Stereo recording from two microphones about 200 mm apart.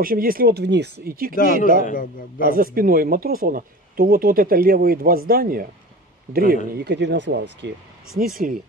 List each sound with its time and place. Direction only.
0.0 s speech: 45° right (ahead or behind)
1.3 s a man's voice: 45° left (ahead or behind)
2.5 s speech: 45° right (ahead or behind)
6.8 s speech: 60° right (ahead or behind)
8.1 s speech: centre (ahead or behind)